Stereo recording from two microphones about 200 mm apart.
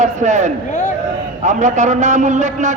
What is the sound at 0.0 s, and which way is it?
Speech, 35° right (ahead or behind).